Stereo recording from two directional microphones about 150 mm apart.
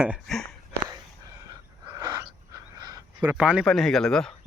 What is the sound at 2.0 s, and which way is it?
Wheeze, 25° right (ahead or behind).